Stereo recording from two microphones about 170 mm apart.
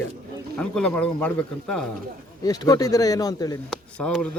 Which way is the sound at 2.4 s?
20° left (ahead or behind).